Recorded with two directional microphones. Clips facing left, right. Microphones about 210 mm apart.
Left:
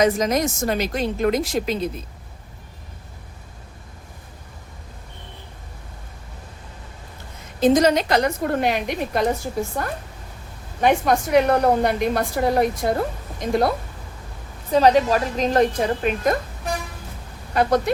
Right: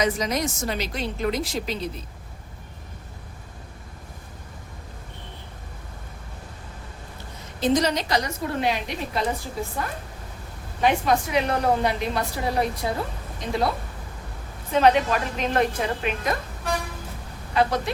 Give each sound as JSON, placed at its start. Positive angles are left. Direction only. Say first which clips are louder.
{"t": 0.0, "sound": "a woman's voice", "louder": "left 5 dB", "side_deg": 45}
{"t": 7.6, "sound": "a woman's voice", "louder": "left 6 dB", "side_deg": 50}
{"t": 10.8, "sound": "a woman's voice", "louder": "left 3 dB", "side_deg": 50}
{"t": 14.7, "sound": "a woman's voice", "louder": "left 3 dB", "side_deg": 35}
{"t": 17.5, "sound": "speech", "louder": "left 4 dB", "side_deg": 45}